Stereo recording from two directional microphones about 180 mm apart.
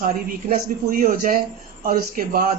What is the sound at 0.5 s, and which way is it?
Speech, 50° right (ahead or behind).